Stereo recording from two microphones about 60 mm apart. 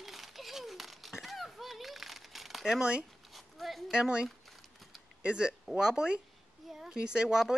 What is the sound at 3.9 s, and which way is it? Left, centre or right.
A woman's voice, centre.